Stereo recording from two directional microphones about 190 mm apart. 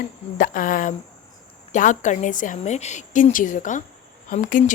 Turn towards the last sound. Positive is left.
turn(degrees=45)  # may be behind; listen again after turning